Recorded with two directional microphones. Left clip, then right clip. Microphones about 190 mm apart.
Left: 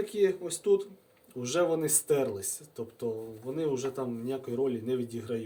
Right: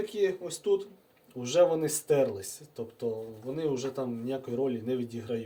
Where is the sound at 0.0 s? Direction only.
15° left (ahead or behind).